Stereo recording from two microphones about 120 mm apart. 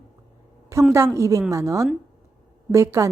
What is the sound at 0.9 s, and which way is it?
Speech, 25° right (ahead or behind).